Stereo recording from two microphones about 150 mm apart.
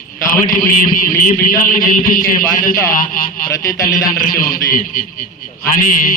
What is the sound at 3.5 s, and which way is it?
A man's voice, 25° left (ahead or behind).